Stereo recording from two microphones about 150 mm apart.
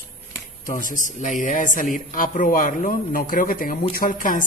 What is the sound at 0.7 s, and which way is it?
Speech, 60° left (ahead or behind).